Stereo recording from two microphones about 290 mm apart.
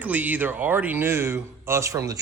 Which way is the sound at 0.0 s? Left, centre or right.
Centre.